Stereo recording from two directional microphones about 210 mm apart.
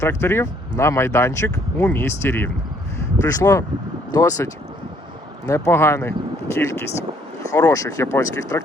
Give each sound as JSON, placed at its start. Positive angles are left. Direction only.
{"t": 0.0, "sound": "speech", "side_deg": 10}
{"t": 5.5, "sound": "speech", "side_deg": 15}